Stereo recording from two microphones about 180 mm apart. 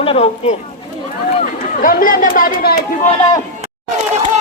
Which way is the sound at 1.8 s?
50° left (ahead or behind).